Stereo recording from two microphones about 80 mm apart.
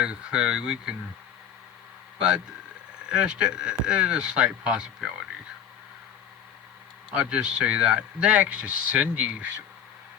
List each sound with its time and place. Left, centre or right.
0.0 s speech: centre
3.1 s speech: centre
7.2 s speech: centre